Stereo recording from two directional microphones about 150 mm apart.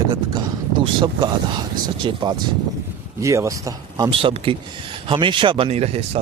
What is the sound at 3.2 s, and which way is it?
Speech, 20° right (ahead or behind).